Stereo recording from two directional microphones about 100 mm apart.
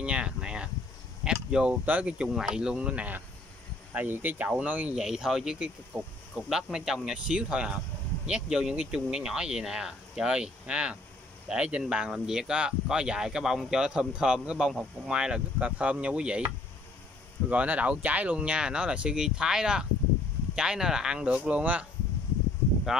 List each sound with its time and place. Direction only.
0.0 s a sound: 10° right (ahead or behind)
1.2 s speech: 10° right (ahead or behind)
17.5 s speech: 15° right (ahead or behind)